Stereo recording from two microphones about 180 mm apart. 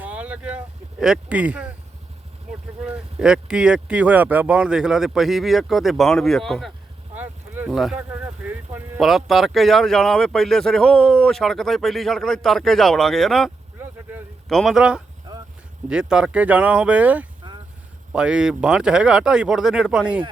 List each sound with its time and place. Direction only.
0.0 s a sound: 10° right (ahead or behind)
2.8 s speech: 5° right (ahead or behind)
7.2 s boat: 10° right (ahead or behind)
8.1 s speech: 10° right (ahead or behind)
17.4 s vehicle: 25° right (ahead or behind)
18.1 s speech: 5° right (ahead or behind)